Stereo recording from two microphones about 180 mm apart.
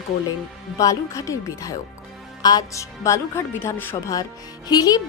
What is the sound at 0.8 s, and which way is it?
Speech, 20° left (ahead or behind).